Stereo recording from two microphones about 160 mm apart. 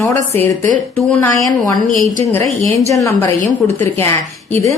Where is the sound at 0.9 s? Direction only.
10° left (ahead or behind).